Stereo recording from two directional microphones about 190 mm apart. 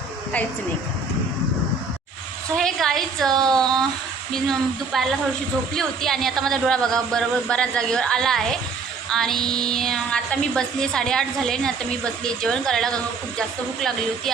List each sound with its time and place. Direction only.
2.6 s a woman's voice: 5° left (ahead or behind)